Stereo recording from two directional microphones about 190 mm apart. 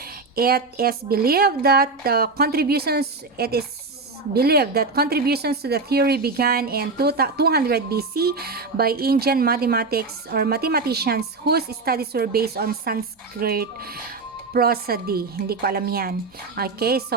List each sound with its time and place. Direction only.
0.0 s speech: 50° right (ahead or behind)